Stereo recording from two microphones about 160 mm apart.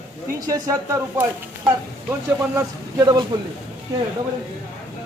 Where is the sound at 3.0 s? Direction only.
25° right (ahead or behind).